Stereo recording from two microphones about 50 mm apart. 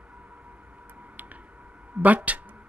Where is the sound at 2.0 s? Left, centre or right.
Right.